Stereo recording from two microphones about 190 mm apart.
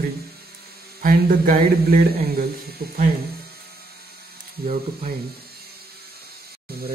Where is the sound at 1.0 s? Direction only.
50° right (ahead or behind).